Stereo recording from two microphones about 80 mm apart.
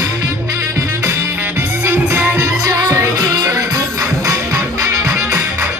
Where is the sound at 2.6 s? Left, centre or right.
Right.